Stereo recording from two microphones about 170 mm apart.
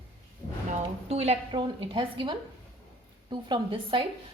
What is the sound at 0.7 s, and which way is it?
A woman's voice, 35° right (ahead or behind).